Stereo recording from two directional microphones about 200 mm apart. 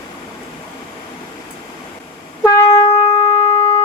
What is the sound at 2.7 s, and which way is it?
Shofar, 30° left (ahead or behind).